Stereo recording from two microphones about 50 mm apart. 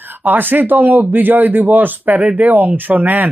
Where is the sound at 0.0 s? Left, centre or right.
Right.